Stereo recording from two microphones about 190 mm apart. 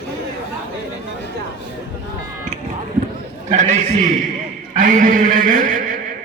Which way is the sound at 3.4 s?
40° right (ahead or behind).